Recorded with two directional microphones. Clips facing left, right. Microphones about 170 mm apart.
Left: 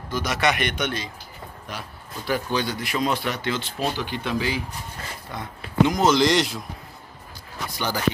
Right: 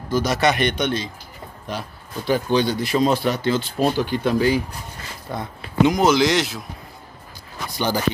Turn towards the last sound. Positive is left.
turn(degrees=-30)  # may be behind; listen again after turning